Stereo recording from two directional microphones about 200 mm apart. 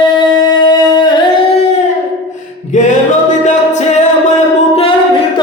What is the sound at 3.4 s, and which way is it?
Music, 35° left (ahead or behind).